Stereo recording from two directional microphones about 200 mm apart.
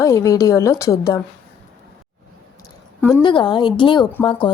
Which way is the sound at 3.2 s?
25° left (ahead or behind).